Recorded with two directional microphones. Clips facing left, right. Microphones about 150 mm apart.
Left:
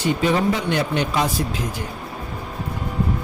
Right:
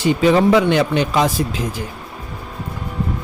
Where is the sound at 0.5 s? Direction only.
90° right.